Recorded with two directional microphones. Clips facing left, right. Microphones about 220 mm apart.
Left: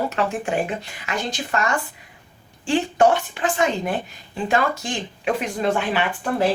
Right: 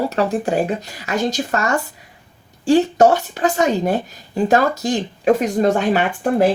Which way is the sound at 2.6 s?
40° right (ahead or behind).